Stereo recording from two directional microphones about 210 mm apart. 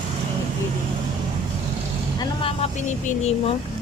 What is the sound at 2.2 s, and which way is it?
Speech, 25° left (ahead or behind).